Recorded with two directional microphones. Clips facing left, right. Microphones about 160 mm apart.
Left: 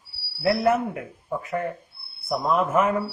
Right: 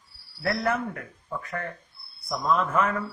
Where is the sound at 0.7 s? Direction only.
25° left (ahead or behind).